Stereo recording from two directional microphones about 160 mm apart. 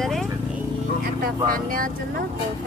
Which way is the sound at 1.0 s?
65° right (ahead or behind).